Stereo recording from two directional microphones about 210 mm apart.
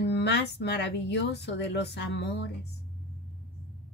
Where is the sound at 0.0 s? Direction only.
50° left (ahead or behind).